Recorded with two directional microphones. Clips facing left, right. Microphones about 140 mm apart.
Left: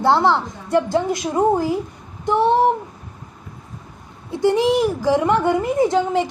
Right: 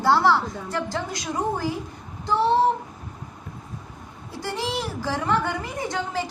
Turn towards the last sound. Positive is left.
turn(degrees=20)  # may be behind; listen again after turning